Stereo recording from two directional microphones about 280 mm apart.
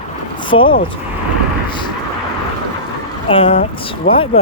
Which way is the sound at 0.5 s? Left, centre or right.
Left.